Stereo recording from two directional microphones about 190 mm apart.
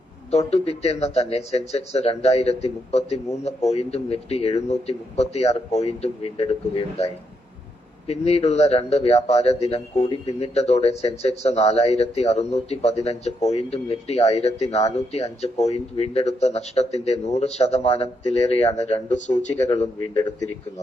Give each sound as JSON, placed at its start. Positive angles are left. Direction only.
{"t": 0.3, "sound": "a man's voice", "side_deg": 35}
{"t": 20.1, "sound": "speech", "side_deg": 20}